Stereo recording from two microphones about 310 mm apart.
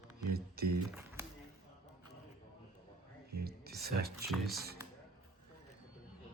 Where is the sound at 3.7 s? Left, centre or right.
Right.